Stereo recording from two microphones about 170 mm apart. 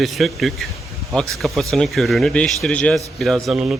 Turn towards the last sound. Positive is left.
turn(degrees=-5)  # may be behind; listen again after turning